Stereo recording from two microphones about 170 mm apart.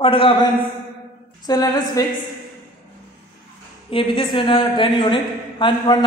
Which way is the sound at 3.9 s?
30° left (ahead or behind).